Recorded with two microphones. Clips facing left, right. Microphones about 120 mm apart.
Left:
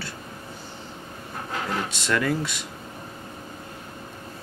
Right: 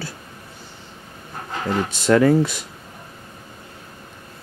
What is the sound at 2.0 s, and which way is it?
Speech, 30° right (ahead or behind).